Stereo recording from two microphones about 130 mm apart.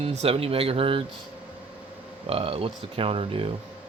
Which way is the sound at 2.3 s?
45° right (ahead or behind).